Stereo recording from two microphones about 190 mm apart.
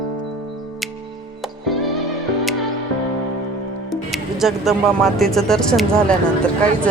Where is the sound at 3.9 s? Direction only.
Centre (ahead or behind).